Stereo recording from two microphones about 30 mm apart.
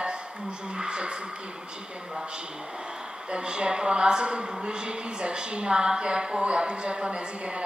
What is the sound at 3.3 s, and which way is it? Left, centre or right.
A woman's voice, right.